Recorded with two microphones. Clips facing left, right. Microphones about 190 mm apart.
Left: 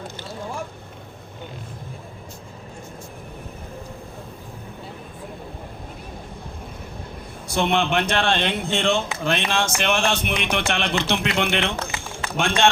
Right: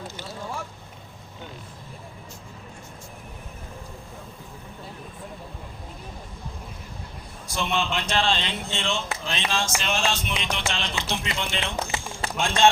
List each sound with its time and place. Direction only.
7.5 s music: 60° left (ahead or behind)